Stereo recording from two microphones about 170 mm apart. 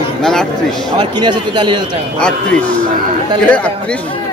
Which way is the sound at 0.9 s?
25° right (ahead or behind).